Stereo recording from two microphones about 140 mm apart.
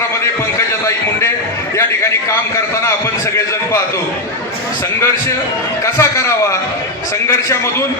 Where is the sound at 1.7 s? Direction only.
20° left (ahead or behind).